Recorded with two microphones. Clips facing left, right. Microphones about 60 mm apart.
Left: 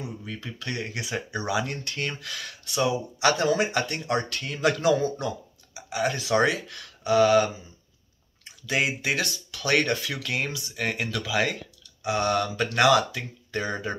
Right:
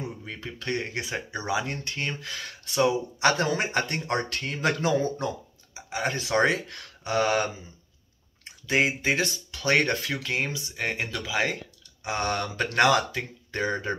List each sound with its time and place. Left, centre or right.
0.2 s speech: right
8.6 s speech: right